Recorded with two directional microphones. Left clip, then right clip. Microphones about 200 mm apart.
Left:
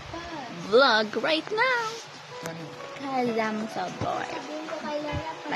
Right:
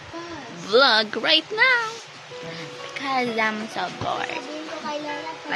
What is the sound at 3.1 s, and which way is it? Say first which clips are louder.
Speech: right 3 dB; 5° left (ahead or behind).